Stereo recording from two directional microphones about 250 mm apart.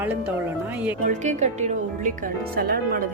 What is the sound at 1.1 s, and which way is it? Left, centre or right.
Speech, right.